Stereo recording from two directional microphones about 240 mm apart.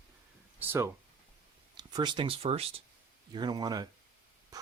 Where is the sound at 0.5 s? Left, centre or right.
Centre.